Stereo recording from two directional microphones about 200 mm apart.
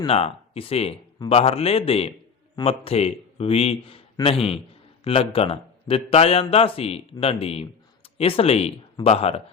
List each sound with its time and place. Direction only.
0.0 s speech: 30° left (ahead or behind)